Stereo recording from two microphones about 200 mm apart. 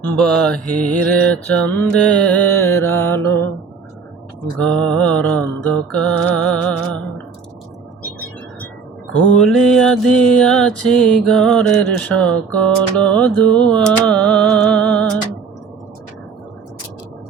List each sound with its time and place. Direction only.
0.0 s mantra: 5° left (ahead or behind)
4.6 s mantra: 5° left (ahead or behind)
9.1 s mantra: 5° left (ahead or behind)